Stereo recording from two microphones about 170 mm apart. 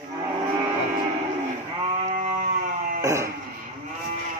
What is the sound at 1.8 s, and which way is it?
Sheep, 45° right (ahead or behind).